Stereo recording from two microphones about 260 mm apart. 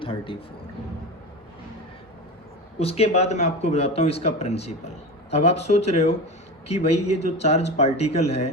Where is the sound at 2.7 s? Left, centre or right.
Left.